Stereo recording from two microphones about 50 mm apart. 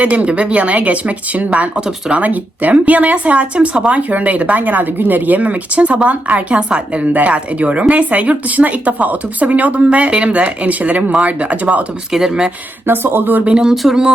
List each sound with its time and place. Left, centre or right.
0.0 s speech: right
12.1 s speech: centre
12.9 s speech: right
13.4 s speech: centre